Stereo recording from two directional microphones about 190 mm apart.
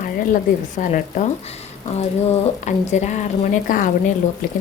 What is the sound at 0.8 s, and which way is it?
A woman's voice, 40° left (ahead or behind).